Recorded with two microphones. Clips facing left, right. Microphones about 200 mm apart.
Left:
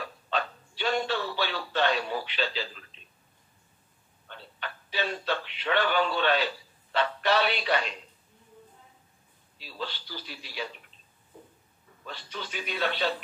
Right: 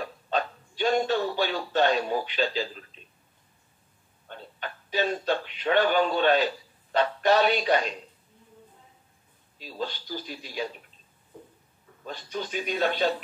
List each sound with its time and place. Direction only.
0.0 s speech: 45° right (ahead or behind)
4.3 s speech: 45° right (ahead or behind)
9.6 s a man's voice: 45° right (ahead or behind)
12.0 s a man's voice: 45° right (ahead or behind)